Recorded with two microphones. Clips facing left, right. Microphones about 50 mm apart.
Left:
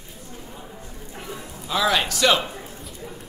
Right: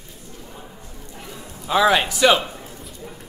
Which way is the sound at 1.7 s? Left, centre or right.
Right.